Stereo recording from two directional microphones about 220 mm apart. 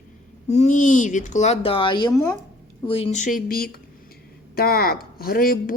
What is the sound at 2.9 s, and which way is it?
Speech, 25° left (ahead or behind).